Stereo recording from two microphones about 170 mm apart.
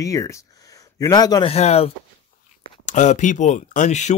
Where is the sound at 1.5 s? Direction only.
40° left (ahead or behind).